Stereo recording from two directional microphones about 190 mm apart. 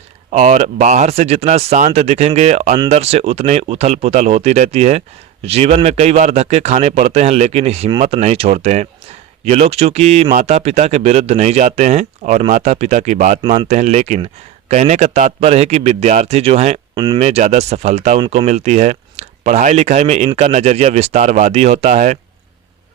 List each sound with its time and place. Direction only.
0.3 s speech: 40° right (ahead or behind)